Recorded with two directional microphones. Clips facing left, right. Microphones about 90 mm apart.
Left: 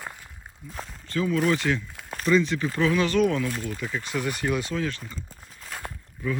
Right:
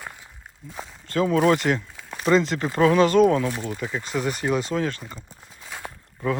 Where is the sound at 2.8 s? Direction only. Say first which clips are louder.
Right 6 dB; 40° right (ahead or behind).